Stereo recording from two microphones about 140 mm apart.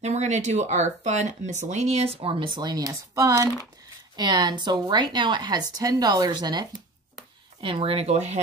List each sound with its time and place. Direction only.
0.0 s speech: 55° right (ahead or behind); by 6.6 s 30° right (ahead or behind)
7.6 s speech: 40° right (ahead or behind)